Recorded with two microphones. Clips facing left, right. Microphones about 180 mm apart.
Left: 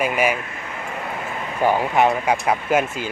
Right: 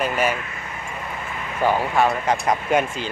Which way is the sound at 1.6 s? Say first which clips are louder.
Left 2 dB; 15° left (ahead or behind).